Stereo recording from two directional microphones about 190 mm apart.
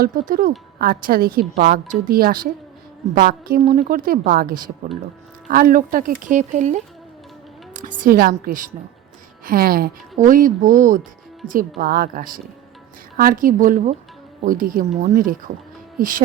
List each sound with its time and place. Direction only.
0.0 s a woman's voice: 45° right (ahead or behind)
16.0 s music: 45° right (ahead or behind)